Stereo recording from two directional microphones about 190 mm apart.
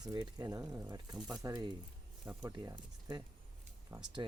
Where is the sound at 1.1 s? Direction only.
Centre (ahead or behind).